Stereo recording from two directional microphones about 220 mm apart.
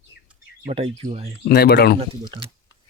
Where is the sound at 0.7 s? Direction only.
25° right (ahead or behind).